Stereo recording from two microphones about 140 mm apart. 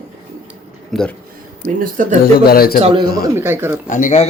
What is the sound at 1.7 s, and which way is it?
Speech, 70° right (ahead or behind).